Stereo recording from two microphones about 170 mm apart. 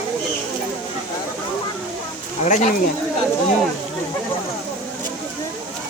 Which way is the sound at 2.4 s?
45° left (ahead or behind).